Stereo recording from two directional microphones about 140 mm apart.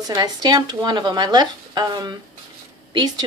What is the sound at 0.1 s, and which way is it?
A woman's voice, 30° right (ahead or behind).